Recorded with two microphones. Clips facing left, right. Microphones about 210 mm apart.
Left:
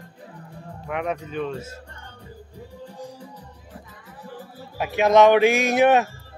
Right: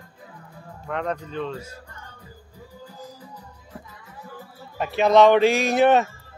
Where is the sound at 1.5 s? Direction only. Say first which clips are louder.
Left 2 dB; 25° left (ahead or behind).